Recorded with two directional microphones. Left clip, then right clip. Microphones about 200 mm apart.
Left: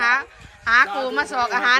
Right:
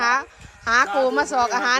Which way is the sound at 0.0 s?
20° right (ahead or behind).